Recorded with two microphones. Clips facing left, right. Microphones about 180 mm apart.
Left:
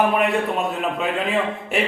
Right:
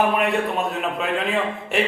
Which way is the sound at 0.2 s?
Centre (ahead or behind).